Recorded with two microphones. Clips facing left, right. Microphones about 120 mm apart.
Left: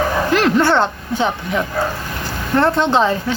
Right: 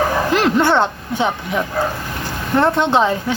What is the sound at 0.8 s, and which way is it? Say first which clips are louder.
A woman's voice: even; 10° right (ahead or behind).